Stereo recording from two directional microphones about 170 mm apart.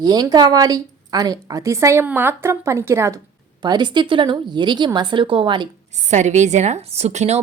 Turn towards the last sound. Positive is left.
turn(degrees=-40)  # may be behind; listen again after turning